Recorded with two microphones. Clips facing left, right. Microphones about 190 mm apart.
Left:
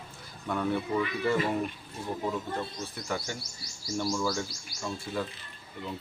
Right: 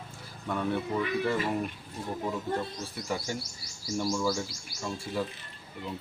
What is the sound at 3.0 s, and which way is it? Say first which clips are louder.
Speech: right 2 dB; 5° right (ahead or behind).